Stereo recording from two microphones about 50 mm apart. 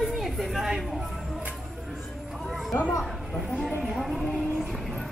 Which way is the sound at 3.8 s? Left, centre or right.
Centre.